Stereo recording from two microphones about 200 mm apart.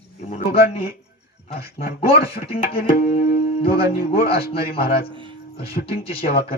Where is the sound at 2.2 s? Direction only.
50° left (ahead or behind).